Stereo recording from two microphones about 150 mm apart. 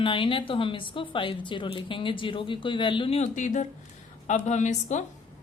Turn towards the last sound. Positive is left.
turn(degrees=55)  # may be behind; listen again after turning